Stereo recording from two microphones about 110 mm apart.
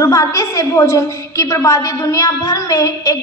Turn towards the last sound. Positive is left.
turn(degrees=35)  # may be behind; listen again after turning